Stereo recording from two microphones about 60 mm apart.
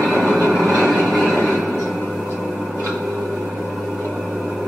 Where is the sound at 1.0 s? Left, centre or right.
Centre.